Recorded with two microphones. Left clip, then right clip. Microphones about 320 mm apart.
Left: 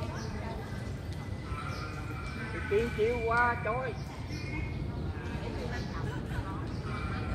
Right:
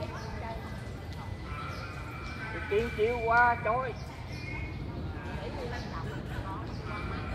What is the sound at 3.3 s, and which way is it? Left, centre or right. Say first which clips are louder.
Speech: right 4 dB; right.